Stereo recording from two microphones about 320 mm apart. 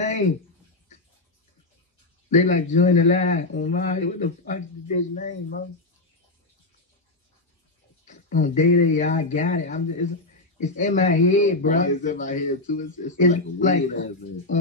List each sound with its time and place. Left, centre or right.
2.2 s speech: left
8.1 s speech: left